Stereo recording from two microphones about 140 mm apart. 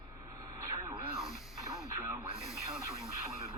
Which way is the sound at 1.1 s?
Centre (ahead or behind).